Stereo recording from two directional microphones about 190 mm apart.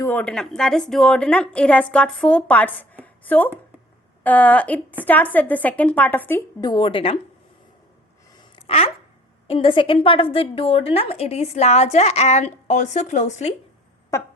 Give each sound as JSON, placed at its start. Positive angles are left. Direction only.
{"t": 0.0, "sound": "a woman's voice", "side_deg": 10}
{"t": 3.0, "sound": "a sound", "side_deg": 10}
{"t": 4.2, "sound": "a woman's voice", "side_deg": 10}
{"t": 6.6, "sound": "speech", "side_deg": 25}
{"t": 8.6, "sound": "a woman's voice", "side_deg": 30}
{"t": 14.1, "sound": "a woman's voice", "side_deg": 15}